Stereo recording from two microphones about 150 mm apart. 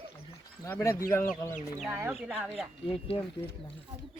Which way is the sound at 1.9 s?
15° right (ahead or behind).